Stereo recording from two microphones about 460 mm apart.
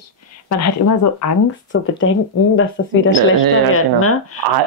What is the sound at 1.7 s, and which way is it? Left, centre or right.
Speech, left.